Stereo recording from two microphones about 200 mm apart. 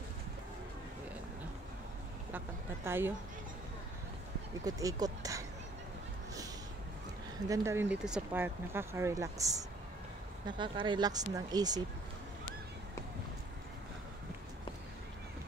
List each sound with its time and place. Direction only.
2.3 s speech: 10° right (ahead or behind)
4.6 s speech: 20° right (ahead or behind)
7.4 s speech: 15° right (ahead or behind)